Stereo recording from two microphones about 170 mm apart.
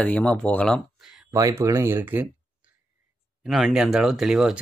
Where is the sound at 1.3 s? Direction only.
15° right (ahead or behind).